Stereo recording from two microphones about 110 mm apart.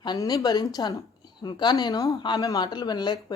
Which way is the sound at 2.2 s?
45° left (ahead or behind).